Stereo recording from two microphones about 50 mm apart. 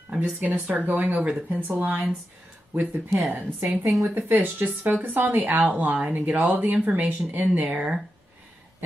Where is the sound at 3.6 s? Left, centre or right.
Centre.